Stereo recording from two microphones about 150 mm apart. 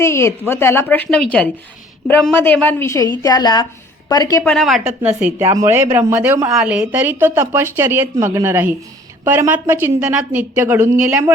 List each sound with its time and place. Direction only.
0.0 s a woman's voice: 15° left (ahead or behind)
4.4 s a woman's voice: centre (ahead or behind); by 10.8 s 15° right (ahead or behind)